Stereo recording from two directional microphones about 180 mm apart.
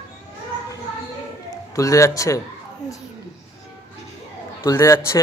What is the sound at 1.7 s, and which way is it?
Speech, 15° left (ahead or behind).